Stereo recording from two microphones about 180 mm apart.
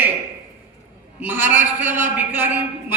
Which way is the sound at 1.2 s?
10° right (ahead or behind).